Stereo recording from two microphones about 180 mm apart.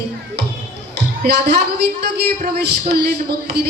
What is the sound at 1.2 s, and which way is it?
Speech, 65° right (ahead or behind).